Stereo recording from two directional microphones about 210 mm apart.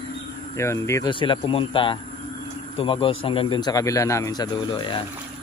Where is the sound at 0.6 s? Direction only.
15° left (ahead or behind).